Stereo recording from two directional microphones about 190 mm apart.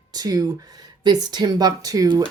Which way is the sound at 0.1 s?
20° right (ahead or behind).